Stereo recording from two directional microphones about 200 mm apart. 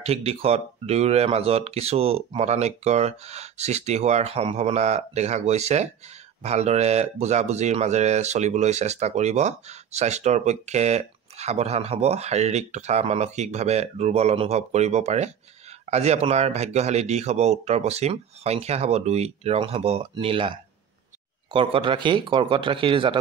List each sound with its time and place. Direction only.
0.0 s speech: 30° right (ahead or behind)